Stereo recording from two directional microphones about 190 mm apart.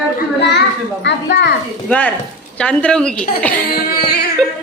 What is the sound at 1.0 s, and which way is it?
Speech, 60° left (ahead or behind).